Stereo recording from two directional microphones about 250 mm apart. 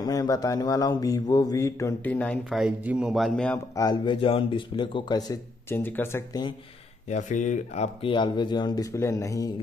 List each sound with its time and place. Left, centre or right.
0.0 s speech: centre
7.1 s speech: left; by 9.5 s centre